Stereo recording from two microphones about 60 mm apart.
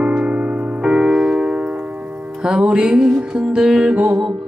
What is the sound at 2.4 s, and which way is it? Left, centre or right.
Music, centre.